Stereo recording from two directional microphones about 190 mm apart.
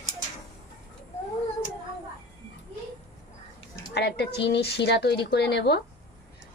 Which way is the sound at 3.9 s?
60° left (ahead or behind).